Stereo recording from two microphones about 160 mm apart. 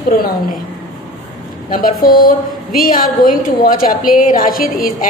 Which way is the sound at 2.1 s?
65° left (ahead or behind).